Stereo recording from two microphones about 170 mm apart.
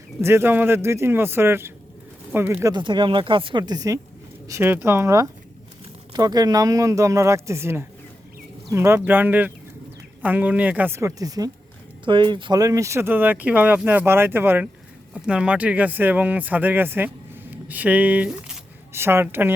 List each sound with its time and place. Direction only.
0.2 s speech: 15° right (ahead or behind)
2.7 s speech: 30° right (ahead or behind); by 19.5 s 10° right (ahead or behind)